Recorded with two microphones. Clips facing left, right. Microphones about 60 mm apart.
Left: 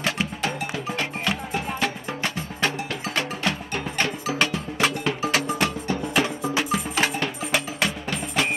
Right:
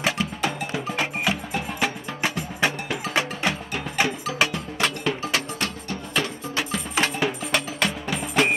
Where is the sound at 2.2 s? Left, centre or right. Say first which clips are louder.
Right 2 dB; centre.